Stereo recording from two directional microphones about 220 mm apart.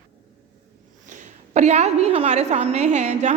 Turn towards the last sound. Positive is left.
turn(degrees=-30)  # may be behind; listen again after turning